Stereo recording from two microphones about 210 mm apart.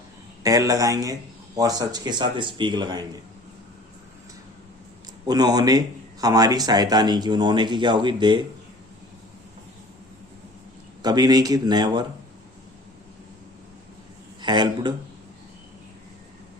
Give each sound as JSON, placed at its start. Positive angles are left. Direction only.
{"t": 0.4, "sound": "a man's voice", "side_deg": -15}
{"t": 5.2, "sound": "speech", "side_deg": -20}
{"t": 11.0, "sound": "speech", "side_deg": -20}
{"t": 14.4, "sound": "speech", "side_deg": -20}